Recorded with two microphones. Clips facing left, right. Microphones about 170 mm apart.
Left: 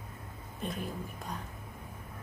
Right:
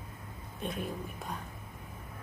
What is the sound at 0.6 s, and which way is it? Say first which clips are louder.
Speech: right 1 dB; centre (ahead or behind).